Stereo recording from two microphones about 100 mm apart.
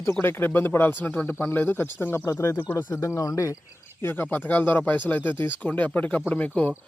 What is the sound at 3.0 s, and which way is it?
Speech, 35° left (ahead or behind).